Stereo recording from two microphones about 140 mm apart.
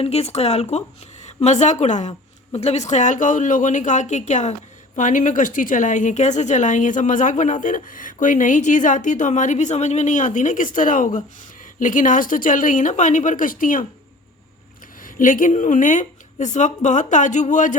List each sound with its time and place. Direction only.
0.0 s a woman's voice: 45° left (ahead or behind); by 13.8 s 75° left (ahead or behind)
15.0 s a woman's voice: 75° left (ahead or behind)